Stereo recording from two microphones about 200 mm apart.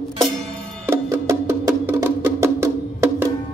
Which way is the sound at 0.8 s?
15° right (ahead or behind).